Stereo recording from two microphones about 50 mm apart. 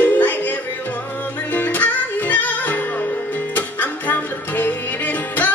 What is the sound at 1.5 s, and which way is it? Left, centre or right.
Music, left.